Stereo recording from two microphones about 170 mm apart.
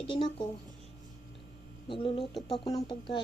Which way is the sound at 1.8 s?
30° left (ahead or behind).